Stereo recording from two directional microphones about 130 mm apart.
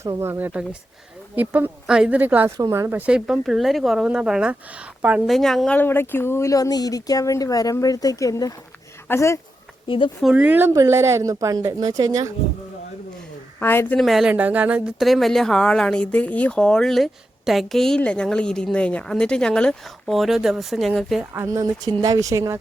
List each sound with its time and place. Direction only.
0.2 s speech: 15° right (ahead or behind)
2.6 s a woman's voice: 25° right (ahead or behind)
3.1 s speech: 5° right (ahead or behind)
5.3 s speech: centre (ahead or behind)
5.7 s speech: 15° left (ahead or behind)
9.8 s speech: 40° left (ahead or behind)
10.3 s a woman's voice: 15° right (ahead or behind)
13.6 s a woman's voice: 15° left (ahead or behind)
14.0 s speech: centre (ahead or behind)
14.9 s speech: centre (ahead or behind)
21.3 s a woman's voice: 25° right (ahead or behind)